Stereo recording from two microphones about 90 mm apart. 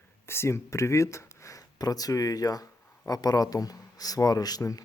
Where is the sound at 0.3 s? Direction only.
30° left (ahead or behind).